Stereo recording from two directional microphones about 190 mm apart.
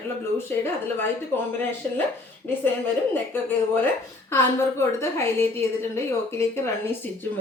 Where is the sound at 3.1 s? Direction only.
10° left (ahead or behind).